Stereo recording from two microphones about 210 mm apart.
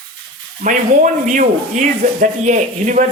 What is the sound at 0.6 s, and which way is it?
A man's voice, 40° right (ahead or behind).